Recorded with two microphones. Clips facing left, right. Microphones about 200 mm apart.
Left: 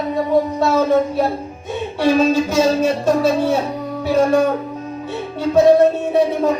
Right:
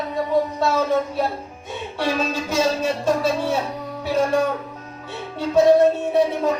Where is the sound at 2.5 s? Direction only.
45° left (ahead or behind).